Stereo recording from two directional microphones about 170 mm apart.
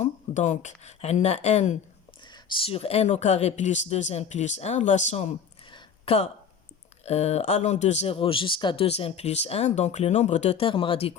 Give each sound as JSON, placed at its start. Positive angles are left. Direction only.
{"t": 0.0, "sound": "speech", "side_deg": 45}
{"t": 2.2, "sound": "speech", "side_deg": 25}
{"t": 5.7, "sound": "a sound", "side_deg": 35}
{"t": 7.0, "sound": "speech", "side_deg": 40}